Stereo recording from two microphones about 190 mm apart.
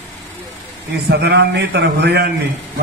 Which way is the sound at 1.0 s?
60° right (ahead or behind).